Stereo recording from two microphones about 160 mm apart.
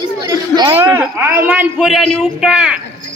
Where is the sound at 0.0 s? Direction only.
30° right (ahead or behind).